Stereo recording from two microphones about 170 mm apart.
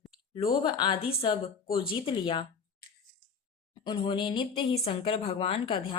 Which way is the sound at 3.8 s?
25° left (ahead or behind).